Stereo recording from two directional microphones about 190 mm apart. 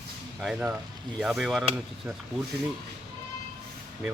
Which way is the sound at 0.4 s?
5° right (ahead or behind).